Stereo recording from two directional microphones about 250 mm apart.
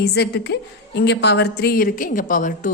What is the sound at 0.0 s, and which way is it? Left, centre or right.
Speech, left.